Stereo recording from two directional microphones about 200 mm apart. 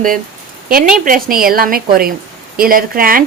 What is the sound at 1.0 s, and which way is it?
Speech, 45° right (ahead or behind).